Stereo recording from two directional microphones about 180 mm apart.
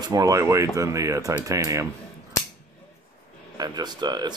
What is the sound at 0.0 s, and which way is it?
Speech, 20° right (ahead or behind).